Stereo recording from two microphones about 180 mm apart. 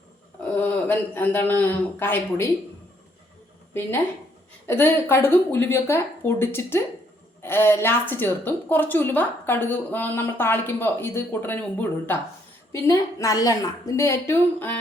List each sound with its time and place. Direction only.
0.5 s a woman's voice: 10° left (ahead or behind)
4.6 s a woman's voice: 10° left (ahead or behind)